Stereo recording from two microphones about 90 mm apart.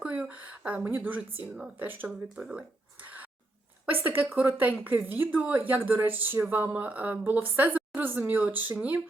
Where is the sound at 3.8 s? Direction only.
20° right (ahead or behind).